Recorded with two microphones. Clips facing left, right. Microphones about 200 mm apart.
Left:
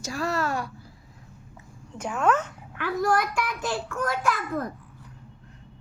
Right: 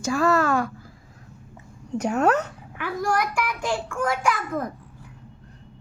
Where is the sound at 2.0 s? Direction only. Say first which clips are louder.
Right 3 dB; 40° right (ahead or behind).